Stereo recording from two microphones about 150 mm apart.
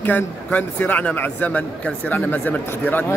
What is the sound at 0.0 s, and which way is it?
Speech, 10° left (ahead or behind).